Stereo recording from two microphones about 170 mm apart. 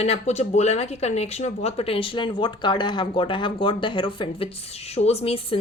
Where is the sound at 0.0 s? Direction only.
40° left (ahead or behind).